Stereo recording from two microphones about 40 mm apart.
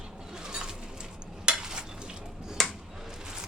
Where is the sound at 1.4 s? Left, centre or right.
Centre.